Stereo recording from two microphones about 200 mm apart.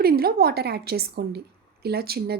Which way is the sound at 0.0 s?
50° right (ahead or behind).